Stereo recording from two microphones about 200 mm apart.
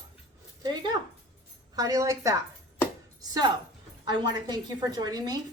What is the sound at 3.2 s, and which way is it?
Music, 20° right (ahead or behind).